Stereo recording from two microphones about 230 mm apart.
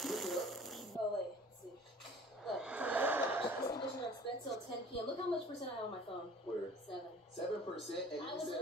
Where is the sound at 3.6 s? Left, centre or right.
Centre.